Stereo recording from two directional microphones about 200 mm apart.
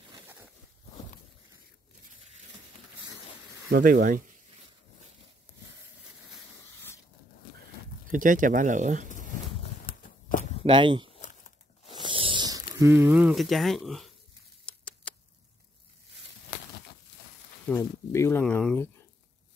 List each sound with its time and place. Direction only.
3.6 s speech: 50° right (ahead or behind)
8.1 s speech: 40° right (ahead or behind)
9.1 s a sound: 40° left (ahead or behind)
10.6 s speech: 25° right (ahead or behind)
11.9 s a sound: 25° right (ahead or behind); by 15.1 s 5° left (ahead or behind)
17.6 s speech: 10° left (ahead or behind)